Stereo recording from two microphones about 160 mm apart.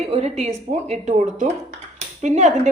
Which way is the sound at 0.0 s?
40° right (ahead or behind).